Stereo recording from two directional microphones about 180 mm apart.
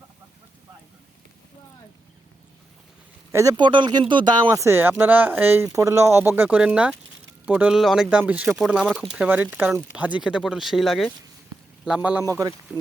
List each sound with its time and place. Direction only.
3.3 s speech: 20° right (ahead or behind); by 11.1 s centre (ahead or behind)
12.2 s speech: 20° right (ahead or behind)